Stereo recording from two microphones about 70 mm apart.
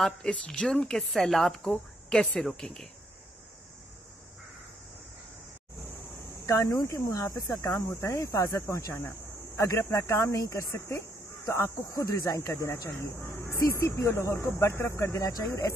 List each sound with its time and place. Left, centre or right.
0.0 s speech: centre
6.4 s speech: left
8.5 s speech: left